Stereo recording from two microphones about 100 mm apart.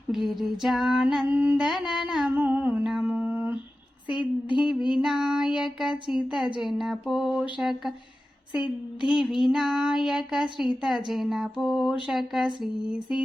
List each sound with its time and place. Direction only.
0.1 s speech: centre (ahead or behind); by 1.6 s 15° right (ahead or behind)
1.9 s speech: 5° right (ahead or behind)
2.3 s child singing: 20° right (ahead or behind)
2.9 s mantra: 15° right (ahead or behind)
4.2 s child singing: 10° right (ahead or behind)
6.6 s speech: 5° right (ahead or behind)
9.0 s speech: 5° right (ahead or behind)
12.0 s child singing: 5° right (ahead or behind)